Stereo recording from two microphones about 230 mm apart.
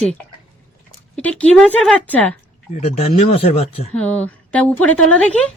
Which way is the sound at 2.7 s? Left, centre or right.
Left.